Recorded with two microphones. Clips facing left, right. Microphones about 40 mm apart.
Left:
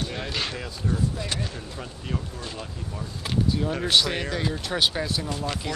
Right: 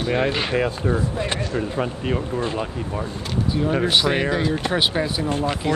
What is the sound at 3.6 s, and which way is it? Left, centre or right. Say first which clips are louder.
A man's voice: right 5 dB; right.